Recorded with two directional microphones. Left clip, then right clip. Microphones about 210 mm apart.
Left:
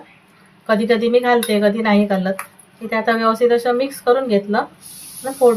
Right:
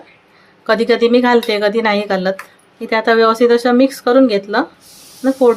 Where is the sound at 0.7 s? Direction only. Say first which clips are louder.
Right 4 dB; 50° right (ahead or behind).